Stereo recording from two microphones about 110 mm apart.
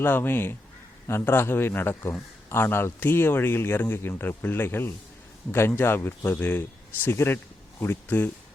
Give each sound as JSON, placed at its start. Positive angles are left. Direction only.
{"t": 0.0, "sound": "speech", "side_deg": 20}